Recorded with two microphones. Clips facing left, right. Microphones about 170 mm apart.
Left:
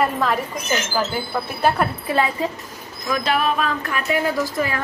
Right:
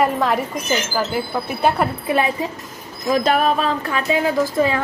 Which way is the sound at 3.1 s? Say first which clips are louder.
Right 4 dB; 40° right (ahead or behind).